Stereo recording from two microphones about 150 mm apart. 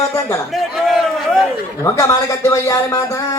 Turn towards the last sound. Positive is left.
turn(degrees=20)  # may be behind; listen again after turning